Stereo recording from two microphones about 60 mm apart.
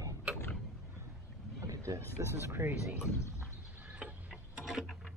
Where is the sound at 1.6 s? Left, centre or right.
Right.